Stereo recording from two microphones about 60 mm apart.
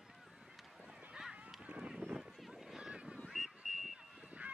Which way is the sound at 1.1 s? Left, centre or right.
Centre.